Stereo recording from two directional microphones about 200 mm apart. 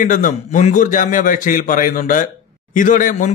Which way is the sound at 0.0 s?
40° left (ahead or behind).